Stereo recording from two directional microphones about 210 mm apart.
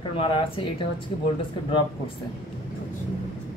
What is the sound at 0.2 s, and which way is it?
Speech, 25° left (ahead or behind).